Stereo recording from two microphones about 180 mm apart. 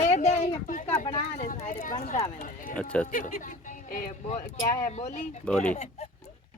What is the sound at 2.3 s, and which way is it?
Run, 50° left (ahead or behind).